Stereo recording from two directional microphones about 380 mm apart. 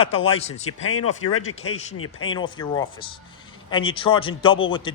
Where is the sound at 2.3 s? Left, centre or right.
Centre.